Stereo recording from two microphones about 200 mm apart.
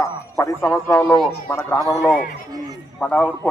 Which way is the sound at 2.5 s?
20° right (ahead or behind).